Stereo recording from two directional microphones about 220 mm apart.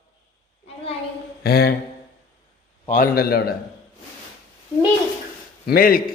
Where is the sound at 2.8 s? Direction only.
40° left (ahead or behind).